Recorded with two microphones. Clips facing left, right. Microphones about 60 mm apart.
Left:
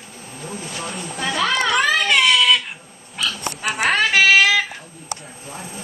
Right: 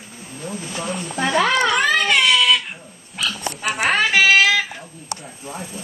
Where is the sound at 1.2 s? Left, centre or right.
Right.